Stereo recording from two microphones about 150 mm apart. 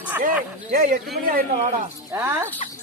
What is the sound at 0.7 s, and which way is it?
Speech, 65° right (ahead or behind).